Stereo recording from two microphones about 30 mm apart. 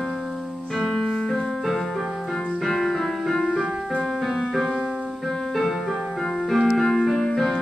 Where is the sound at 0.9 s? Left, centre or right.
Left.